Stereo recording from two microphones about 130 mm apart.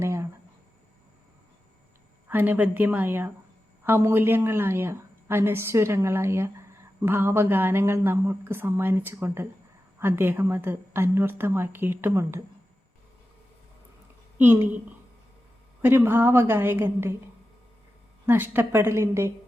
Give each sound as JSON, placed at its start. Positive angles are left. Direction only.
{"t": 0.0, "sound": "a sound", "side_deg": -20}
{"t": 2.2, "sound": "a woman's voice", "side_deg": -15}
{"t": 14.3, "sound": "a woman's voice", "side_deg": -15}
{"t": 15.8, "sound": "a woman's voice", "side_deg": -20}
{"t": 18.3, "sound": "a woman's voice", "side_deg": -15}